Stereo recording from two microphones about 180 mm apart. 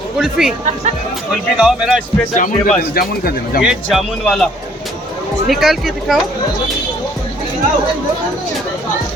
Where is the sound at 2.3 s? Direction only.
45° left (ahead or behind).